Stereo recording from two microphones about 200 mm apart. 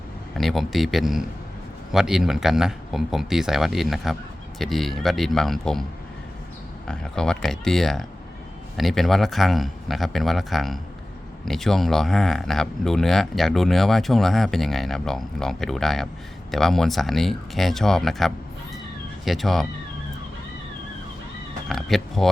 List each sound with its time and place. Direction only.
0.3 s speech: centre (ahead or behind)
6.8 s speech: 5° left (ahead or behind)
21.7 s speech: centre (ahead or behind)